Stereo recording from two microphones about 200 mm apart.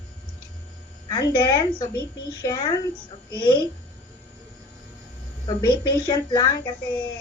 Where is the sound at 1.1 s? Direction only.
20° left (ahead or behind).